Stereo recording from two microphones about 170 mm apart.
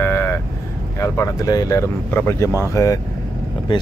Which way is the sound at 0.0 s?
15° left (ahead or behind).